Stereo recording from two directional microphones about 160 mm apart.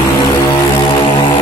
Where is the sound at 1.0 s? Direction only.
30° left (ahead or behind).